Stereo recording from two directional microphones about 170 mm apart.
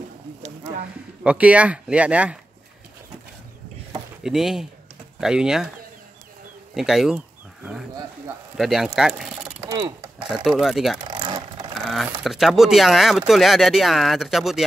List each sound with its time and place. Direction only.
1.2 s speech: 5° right (ahead or behind)
4.2 s speech: centre (ahead or behind)
6.7 s bird: centre (ahead or behind)
8.5 s speech: centre (ahead or behind)
9.6 s mechanisms: 20° right (ahead or behind)
10.3 s speech: centre (ahead or behind)
11.1 s vehicle: 30° right (ahead or behind)
11.9 s speech: centre (ahead or behind)